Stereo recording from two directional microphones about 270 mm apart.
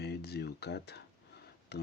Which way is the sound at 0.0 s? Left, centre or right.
Left.